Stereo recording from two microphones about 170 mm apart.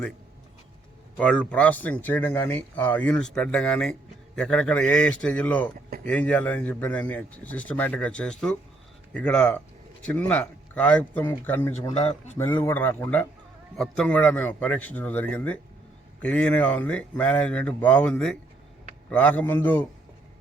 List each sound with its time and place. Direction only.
1.1 s a man's voice: 5° left (ahead or behind)
11.9 s a man's voice: 40° left (ahead or behind)
12.4 s speech: 10° left (ahead or behind)